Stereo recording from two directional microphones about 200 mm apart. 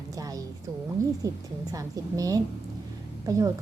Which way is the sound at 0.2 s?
15° right (ahead or behind).